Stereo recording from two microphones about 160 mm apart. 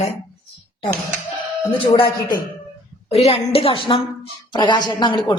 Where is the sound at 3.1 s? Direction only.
40° left (ahead or behind).